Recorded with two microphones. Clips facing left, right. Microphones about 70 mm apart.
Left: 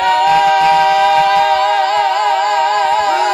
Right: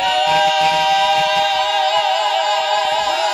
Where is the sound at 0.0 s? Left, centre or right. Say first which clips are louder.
Left 4 dB; left.